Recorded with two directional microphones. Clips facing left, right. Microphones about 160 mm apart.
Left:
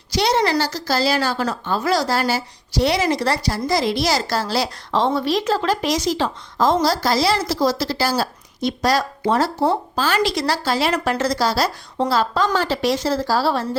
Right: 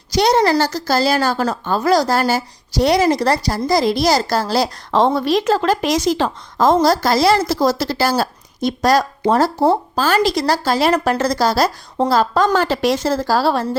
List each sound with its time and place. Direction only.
0.1 s a woman's voice: 45° right (ahead or behind)